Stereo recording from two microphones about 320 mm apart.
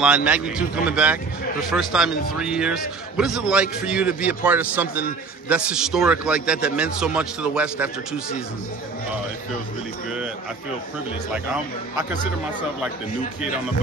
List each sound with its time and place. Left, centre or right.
0.0 s a man's voice: centre